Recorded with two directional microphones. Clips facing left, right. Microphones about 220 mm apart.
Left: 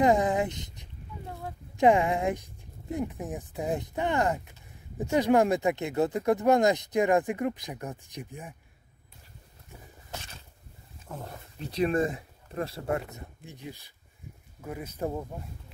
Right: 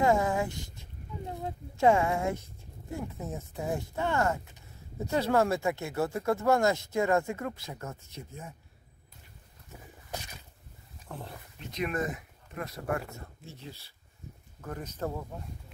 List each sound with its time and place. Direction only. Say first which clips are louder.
0.0 s speech: left 3 dB; 20° left (ahead or behind)
1.2 s a sound: right 3 dB; 20° right (ahead or behind)
1.8 s speech: left 2 dB; 15° left (ahead or behind)
11.6 s speech: left 6 dB; 30° left (ahead or behind); by 15.2 s 15° left (ahead or behind)